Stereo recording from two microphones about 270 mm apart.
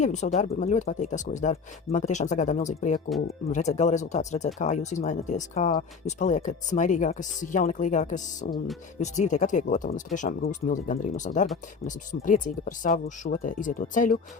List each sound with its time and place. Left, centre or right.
0.0 s speech: left